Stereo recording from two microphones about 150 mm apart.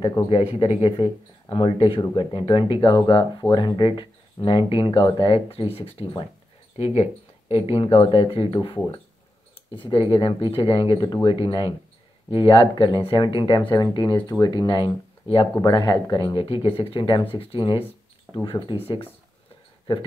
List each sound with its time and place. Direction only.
0.6 s speech: 40° left (ahead or behind)